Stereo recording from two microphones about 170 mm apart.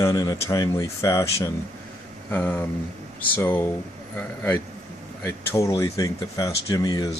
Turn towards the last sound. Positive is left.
turn(degrees=25)  # may be behind; listen again after turning